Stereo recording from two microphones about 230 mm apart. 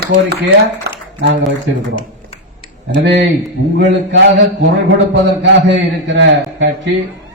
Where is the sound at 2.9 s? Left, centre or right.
Right.